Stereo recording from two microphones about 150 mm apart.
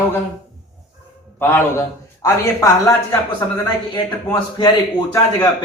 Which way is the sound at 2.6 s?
25° left (ahead or behind).